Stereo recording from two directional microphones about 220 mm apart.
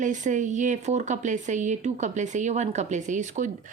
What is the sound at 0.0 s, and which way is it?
Speech, 35° right (ahead or behind).